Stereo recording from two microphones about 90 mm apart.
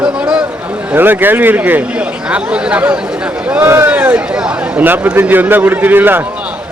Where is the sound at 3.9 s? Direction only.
15° right (ahead or behind).